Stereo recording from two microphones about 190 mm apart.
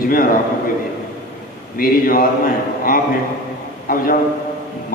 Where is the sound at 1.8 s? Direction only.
50° left (ahead or behind).